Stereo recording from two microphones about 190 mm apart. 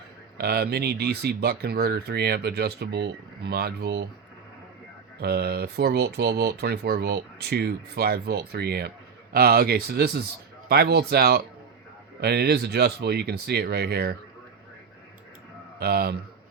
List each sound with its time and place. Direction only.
0.3 s speech: 55° right (ahead or behind)
5.2 s speech: 55° right (ahead or behind)
15.8 s speech: 55° right (ahead or behind)